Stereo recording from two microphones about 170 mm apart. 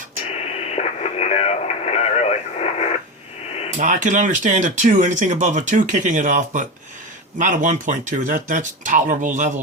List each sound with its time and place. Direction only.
0.3 s radio: 35° left (ahead or behind)
3.8 s speech: 45° right (ahead or behind)